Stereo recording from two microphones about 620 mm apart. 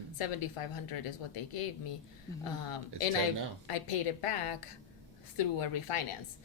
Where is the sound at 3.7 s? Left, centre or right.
Left.